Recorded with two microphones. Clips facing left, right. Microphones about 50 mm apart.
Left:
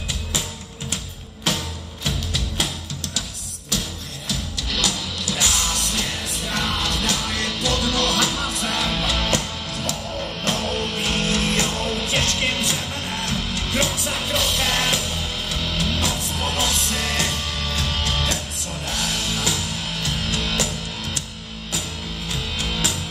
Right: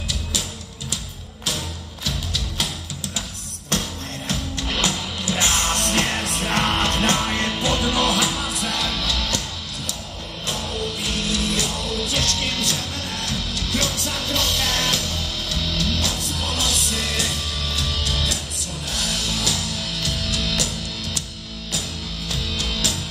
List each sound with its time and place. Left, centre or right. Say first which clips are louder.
3.7 s music: right 2 dB; right
4.3 s music: right 1 dB; right; by 8.8 s centre
8.8 s music: left 2 dB; left
10.4 s music: left 2 dB; left
13.8 s music: left 1 dB; centre; by 21.2 s left
22.3 s music: even; left